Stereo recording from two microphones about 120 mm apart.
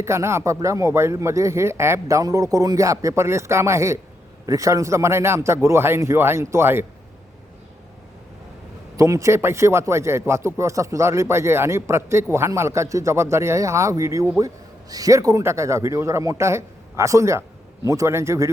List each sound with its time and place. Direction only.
0.0 s speech: 20° right (ahead or behind)
9.0 s speech: 25° right (ahead or behind)